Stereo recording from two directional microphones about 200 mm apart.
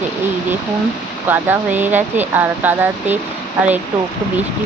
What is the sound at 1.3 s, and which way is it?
Speech, 10° right (ahead or behind).